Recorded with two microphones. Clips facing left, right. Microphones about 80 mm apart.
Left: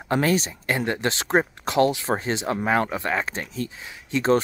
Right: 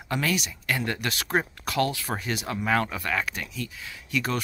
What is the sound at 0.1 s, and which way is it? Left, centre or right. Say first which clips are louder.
Speech: left 6 dB; left.